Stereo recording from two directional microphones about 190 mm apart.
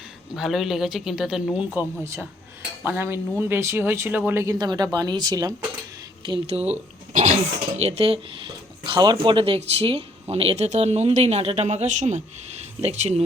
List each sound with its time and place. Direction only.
0.3 s speech: centre (ahead or behind); by 13.2 s 35° right (ahead or behind)